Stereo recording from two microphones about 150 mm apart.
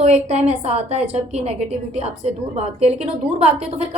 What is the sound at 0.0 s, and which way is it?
A woman's voice, 50° right (ahead or behind).